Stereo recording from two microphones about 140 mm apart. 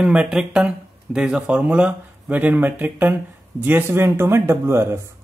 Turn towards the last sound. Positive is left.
turn(degrees=-20)  # may be behind; listen again after turning